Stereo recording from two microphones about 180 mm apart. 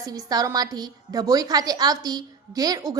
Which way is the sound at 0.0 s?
20° right (ahead or behind).